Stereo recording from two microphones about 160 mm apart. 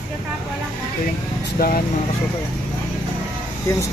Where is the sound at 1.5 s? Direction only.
65° left (ahead or behind).